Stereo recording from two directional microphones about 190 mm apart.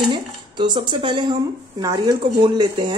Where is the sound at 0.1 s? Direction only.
25° right (ahead or behind).